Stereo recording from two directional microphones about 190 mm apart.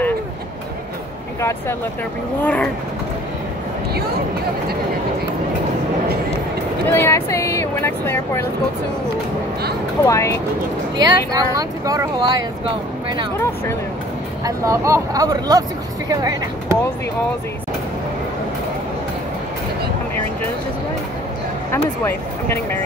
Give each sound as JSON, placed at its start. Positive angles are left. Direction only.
{"t": 2.4, "sound": "speech", "side_deg": 10}
{"t": 6.9, "sound": "speech", "side_deg": 10}
{"t": 10.0, "sound": "speech", "side_deg": 15}
{"t": 11.0, "sound": "speech", "side_deg": -20}
{"t": 14.4, "sound": "speech", "side_deg": -15}
{"t": 22.0, "sound": "speech", "side_deg": 15}